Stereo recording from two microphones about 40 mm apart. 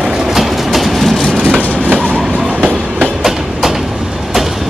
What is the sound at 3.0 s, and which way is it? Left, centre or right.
Train, centre.